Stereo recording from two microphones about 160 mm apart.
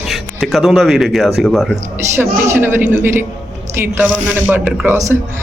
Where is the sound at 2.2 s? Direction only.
15° right (ahead or behind).